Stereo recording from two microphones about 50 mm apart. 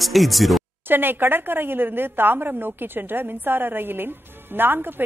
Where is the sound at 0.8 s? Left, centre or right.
Right.